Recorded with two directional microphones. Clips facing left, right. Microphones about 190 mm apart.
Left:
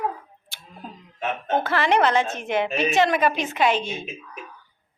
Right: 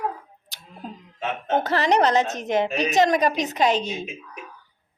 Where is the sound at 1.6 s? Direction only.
40° right (ahead or behind).